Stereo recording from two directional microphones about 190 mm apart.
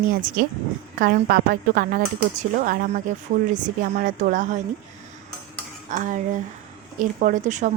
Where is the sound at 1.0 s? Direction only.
50° right (ahead or behind).